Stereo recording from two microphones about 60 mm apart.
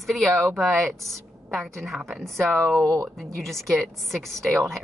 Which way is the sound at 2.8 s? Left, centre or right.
Right.